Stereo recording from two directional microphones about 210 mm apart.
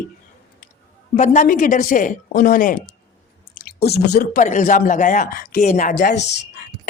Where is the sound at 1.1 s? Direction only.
35° left (ahead or behind).